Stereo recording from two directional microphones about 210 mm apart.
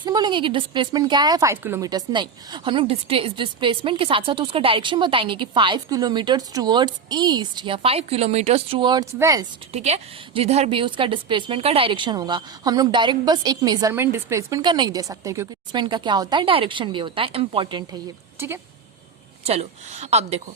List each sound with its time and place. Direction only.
0.0 s a woman's voice: 20° right (ahead or behind)
9.7 s a woman's voice: 30° right (ahead or behind)
18.3 s speech: 10° right (ahead or behind)
19.5 s a woman's voice: 30° right (ahead or behind)